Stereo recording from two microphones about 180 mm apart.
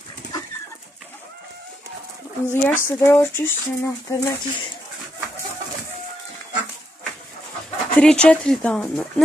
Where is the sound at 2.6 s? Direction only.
15° left (ahead or behind).